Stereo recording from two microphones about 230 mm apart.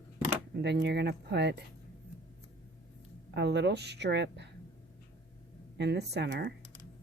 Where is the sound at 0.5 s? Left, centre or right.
Right.